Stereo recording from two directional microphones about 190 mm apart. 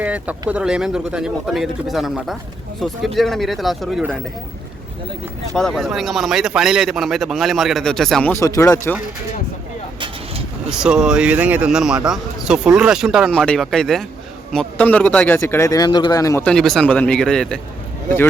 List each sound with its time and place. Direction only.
0.0 s a man's voice: 10° right (ahead or behind)
5.5 s a man's voice: centre (ahead or behind)
8.3 s speech: 15° left (ahead or behind)
10.7 s a man's voice: 5° right (ahead or behind); by 16.4 s 20° left (ahead or behind)
16.4 s a man's voice: 5° left (ahead or behind)